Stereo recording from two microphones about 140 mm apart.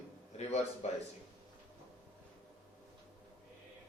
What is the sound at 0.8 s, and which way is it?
Speech, 50° left (ahead or behind).